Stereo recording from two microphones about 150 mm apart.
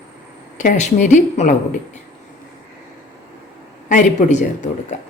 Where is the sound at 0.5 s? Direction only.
55° left (ahead or behind).